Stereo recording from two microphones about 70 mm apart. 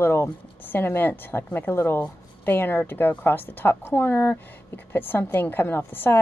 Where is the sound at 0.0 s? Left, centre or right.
Left.